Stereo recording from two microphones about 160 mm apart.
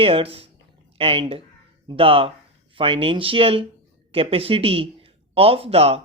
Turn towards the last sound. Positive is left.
turn(degrees=-40)  # may be behind; listen again after turning